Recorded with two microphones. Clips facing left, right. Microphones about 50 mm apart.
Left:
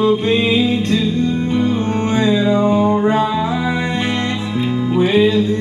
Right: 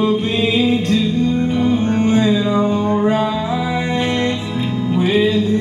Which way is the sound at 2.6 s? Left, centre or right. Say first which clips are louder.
Left 2 dB; centre.